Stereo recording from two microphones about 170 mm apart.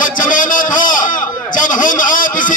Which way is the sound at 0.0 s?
50° left (ahead or behind).